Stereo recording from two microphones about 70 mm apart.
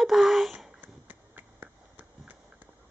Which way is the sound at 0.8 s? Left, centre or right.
Right.